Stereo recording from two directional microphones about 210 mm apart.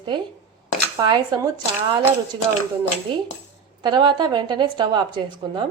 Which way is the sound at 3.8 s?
20° right (ahead or behind).